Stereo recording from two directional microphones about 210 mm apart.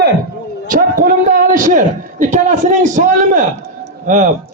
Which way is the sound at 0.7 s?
40° right (ahead or behind).